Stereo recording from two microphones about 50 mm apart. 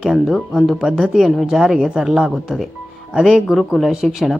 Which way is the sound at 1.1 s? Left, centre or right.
Centre.